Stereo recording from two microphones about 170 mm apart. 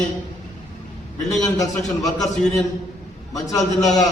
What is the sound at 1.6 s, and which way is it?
Speech, 20° left (ahead or behind).